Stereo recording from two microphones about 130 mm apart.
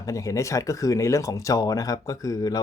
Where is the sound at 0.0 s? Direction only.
25° left (ahead or behind).